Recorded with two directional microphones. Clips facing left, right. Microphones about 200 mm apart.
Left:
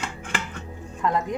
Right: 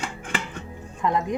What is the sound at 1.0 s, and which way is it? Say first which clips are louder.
Speech: right 1 dB; 20° right (ahead or behind).